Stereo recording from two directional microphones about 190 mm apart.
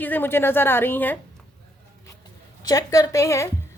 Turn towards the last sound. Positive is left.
turn(degrees=15)  # may be behind; listen again after turning